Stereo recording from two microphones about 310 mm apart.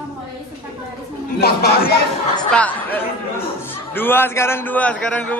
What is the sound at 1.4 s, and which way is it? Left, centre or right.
Speech, left.